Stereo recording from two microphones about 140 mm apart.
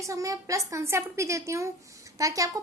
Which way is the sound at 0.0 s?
25° right (ahead or behind).